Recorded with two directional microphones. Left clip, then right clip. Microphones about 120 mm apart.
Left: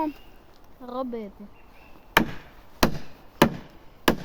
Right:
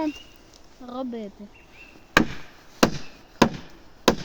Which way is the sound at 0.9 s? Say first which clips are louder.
Left 1 dB; 20° left (ahead or behind).